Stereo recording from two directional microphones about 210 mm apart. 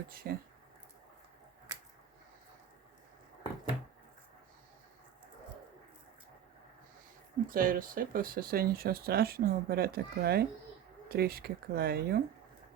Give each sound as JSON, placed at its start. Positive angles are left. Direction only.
{"t": 0.1, "sound": "speech", "side_deg": -45}
{"t": 7.4, "sound": "speech", "side_deg": -40}